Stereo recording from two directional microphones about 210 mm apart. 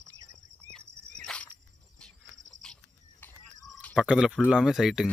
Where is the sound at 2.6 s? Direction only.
5° left (ahead or behind).